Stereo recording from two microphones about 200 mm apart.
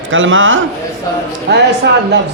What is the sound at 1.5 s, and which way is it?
Speech, 60° right (ahead or behind).